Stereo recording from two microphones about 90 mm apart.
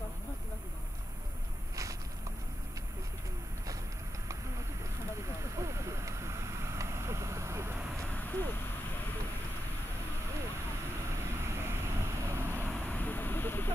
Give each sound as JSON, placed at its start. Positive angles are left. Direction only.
{"t": 5.6, "sound": "vehicle", "side_deg": -30}
{"t": 8.1, "sound": "a sound", "side_deg": 20}
{"t": 11.4, "sound": "vehicle", "side_deg": -30}
{"t": 12.7, "sound": "vehicle", "side_deg": 20}